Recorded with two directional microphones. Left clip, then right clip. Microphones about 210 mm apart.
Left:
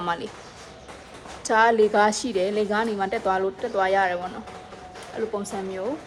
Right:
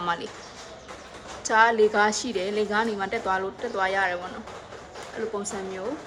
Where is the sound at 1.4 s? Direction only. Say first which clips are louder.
Left 1 dB; centre (ahead or behind).